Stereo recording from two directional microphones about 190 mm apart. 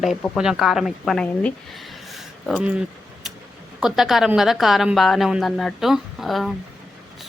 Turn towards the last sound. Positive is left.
turn(degrees=0)  # may be behind; listen again after turning